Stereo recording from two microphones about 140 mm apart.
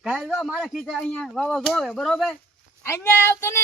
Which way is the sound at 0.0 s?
5° right (ahead or behind).